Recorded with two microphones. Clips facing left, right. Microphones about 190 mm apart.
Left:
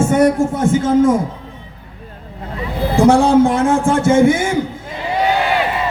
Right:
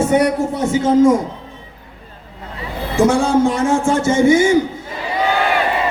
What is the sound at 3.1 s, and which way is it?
A man's voice, 55° left (ahead or behind).